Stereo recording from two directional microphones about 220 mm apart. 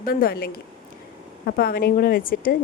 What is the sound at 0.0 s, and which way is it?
A woman's voice, 40° left (ahead or behind).